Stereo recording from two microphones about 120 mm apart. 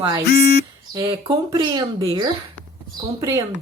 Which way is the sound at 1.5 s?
30° right (ahead or behind).